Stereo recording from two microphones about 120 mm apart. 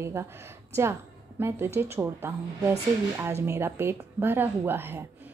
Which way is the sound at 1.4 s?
20° right (ahead or behind).